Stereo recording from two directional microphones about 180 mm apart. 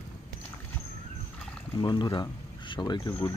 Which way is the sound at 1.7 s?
25° left (ahead or behind).